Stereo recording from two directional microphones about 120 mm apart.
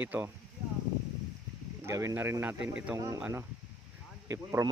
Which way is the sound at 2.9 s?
30° right (ahead or behind).